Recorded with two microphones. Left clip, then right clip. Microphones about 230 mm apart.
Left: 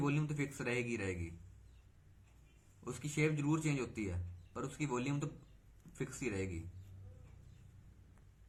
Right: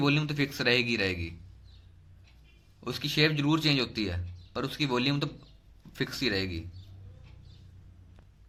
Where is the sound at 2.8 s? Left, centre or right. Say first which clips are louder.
Right 11 dB; right.